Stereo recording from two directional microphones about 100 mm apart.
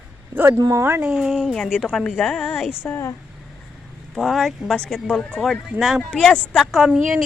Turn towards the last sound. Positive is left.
turn(degrees=0)  # may be behind; listen again after turning